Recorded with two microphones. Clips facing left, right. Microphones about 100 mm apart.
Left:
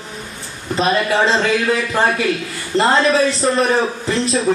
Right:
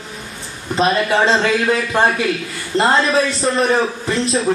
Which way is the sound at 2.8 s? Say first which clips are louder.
Left 1 dB; centre (ahead or behind).